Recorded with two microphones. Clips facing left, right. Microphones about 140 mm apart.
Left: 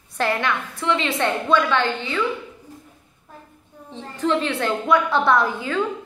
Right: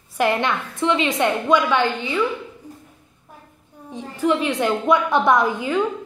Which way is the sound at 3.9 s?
10° right (ahead or behind).